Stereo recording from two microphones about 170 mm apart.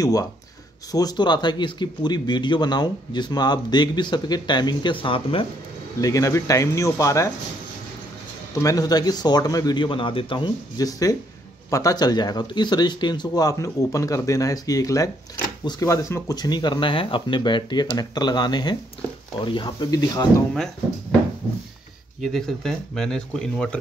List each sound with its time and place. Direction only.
0.0 s speech: 20° left (ahead or behind)
5.9 s speech: 20° left (ahead or behind)
8.5 s speech: 20° left (ahead or behind)
22.2 s speech: centre (ahead or behind)